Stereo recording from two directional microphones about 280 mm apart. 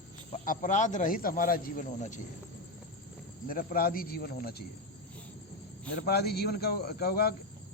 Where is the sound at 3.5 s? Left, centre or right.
Left.